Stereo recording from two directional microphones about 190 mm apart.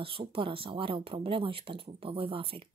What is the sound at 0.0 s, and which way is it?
A woman's voice, 30° right (ahead or behind).